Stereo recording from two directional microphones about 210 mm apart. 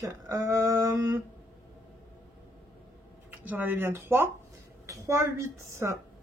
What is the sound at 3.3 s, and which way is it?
Speech, 10° right (ahead or behind).